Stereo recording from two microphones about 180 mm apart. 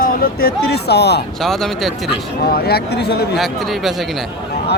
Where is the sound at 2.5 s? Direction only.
60° left (ahead or behind).